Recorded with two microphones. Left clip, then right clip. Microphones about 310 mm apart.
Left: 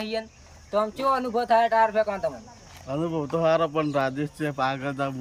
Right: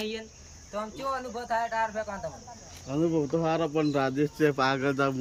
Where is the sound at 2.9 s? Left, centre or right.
Centre.